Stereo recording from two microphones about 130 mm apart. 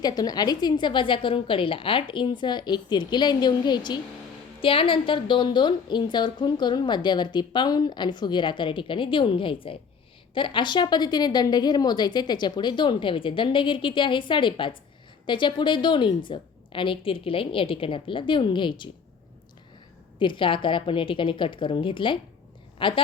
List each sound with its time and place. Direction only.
0.0 s a woman's voice: 30° left (ahead or behind)
20.1 s a woman's voice: 40° left (ahead or behind)